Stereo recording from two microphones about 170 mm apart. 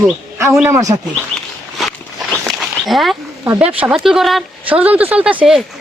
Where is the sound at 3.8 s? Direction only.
Centre (ahead or behind).